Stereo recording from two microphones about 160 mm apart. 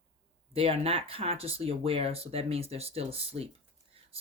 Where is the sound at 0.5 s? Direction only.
35° right (ahead or behind).